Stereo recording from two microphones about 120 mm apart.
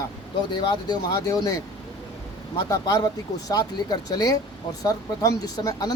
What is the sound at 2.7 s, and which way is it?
Speech, 30° left (ahead or behind).